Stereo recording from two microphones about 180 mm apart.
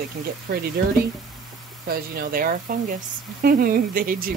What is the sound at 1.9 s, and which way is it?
Speech, 55° right (ahead or behind).